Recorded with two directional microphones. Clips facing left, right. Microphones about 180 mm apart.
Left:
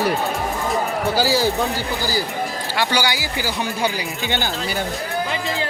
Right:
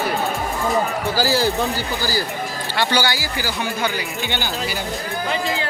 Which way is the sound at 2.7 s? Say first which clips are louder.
Right 1 dB; 10° left (ahead or behind).